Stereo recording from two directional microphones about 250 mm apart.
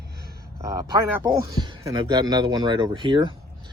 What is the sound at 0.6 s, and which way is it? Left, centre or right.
Speech, centre.